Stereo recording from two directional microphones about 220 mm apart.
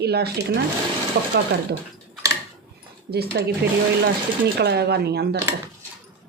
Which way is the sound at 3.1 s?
45° right (ahead or behind).